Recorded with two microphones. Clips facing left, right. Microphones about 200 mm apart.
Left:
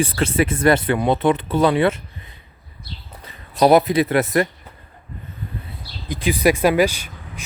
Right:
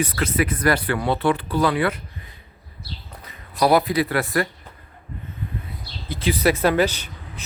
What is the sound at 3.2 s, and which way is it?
Speech, 25° left (ahead or behind).